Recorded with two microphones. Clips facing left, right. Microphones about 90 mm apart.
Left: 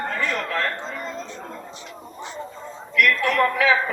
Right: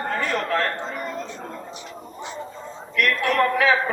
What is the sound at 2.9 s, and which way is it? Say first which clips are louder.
Speech: left 1 dB; 40° right (ahead or behind).